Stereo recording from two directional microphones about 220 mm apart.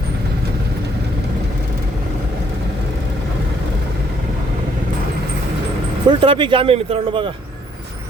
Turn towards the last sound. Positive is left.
turn(degrees=-25)  # may be behind; listen again after turning